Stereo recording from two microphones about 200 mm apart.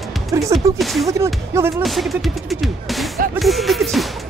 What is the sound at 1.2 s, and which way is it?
Speech, 10° right (ahead or behind).